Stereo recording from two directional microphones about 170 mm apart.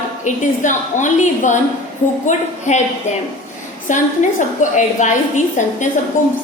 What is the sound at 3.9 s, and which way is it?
A woman's voice, 45° left (ahead or behind).